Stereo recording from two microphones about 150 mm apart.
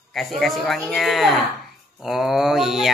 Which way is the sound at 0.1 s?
Centre (ahead or behind).